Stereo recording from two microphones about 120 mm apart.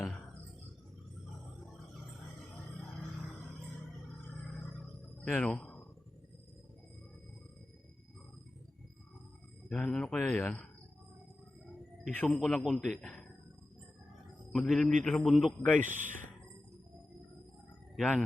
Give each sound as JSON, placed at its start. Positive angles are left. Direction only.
{"t": 5.2, "sound": "a sound", "side_deg": 5}
{"t": 9.6, "sound": "speech", "side_deg": 5}
{"t": 12.1, "sound": "speech", "side_deg": 15}
{"t": 12.4, "sound": "a man's voice", "side_deg": 0}
{"t": 13.0, "sound": "speech", "side_deg": 10}
{"t": 14.5, "sound": "a man's voice", "side_deg": 0}
{"t": 15.8, "sound": "speech", "side_deg": -90}
{"t": 17.9, "sound": "speech", "side_deg": 0}